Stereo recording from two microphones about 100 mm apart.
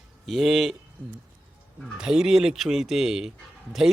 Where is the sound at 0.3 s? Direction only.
Centre (ahead or behind).